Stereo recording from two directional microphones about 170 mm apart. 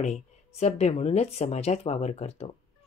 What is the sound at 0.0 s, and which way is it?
Speech, 40° left (ahead or behind).